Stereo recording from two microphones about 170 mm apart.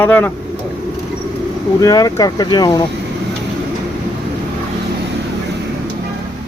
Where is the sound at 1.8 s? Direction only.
20° left (ahead or behind).